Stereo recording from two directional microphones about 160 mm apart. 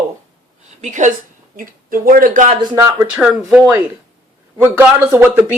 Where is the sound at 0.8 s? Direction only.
50° right (ahead or behind).